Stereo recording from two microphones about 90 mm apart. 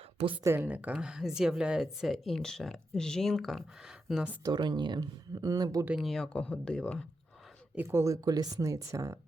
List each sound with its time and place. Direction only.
0.4 s speech: 25° right (ahead or behind)
0.7 s speech: 15° right (ahead or behind)
4.4 s speech: 50° right (ahead or behind)
6.0 s speech: 5° left (ahead or behind)
7.8 s speech: 30° right (ahead or behind)